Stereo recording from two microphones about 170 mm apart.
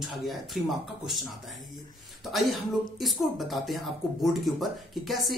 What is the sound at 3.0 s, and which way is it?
Speech, centre (ahead or behind).